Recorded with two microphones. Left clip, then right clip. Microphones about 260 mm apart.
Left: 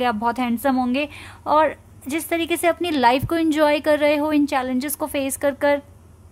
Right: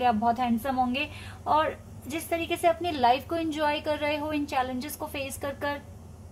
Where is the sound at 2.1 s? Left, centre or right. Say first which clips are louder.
Left 7 dB; left.